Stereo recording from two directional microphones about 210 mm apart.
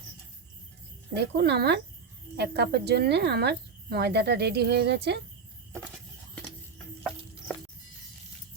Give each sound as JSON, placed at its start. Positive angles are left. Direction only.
{"t": 1.1, "sound": "a woman's voice", "side_deg": -55}